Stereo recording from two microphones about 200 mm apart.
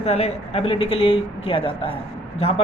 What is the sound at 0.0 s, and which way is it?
Speech, 30° left (ahead or behind).